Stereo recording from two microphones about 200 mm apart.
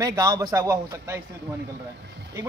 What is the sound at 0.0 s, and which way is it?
A man's voice, 15° right (ahead or behind).